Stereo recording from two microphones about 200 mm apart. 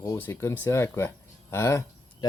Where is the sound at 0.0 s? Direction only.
10° left (ahead or behind).